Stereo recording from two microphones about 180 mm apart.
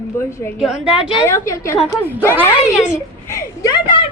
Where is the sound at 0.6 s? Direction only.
5° right (ahead or behind).